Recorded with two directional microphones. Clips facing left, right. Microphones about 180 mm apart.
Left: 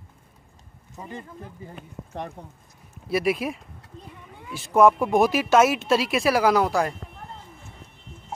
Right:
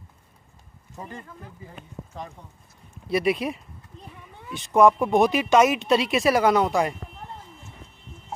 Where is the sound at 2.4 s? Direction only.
45° left (ahead or behind).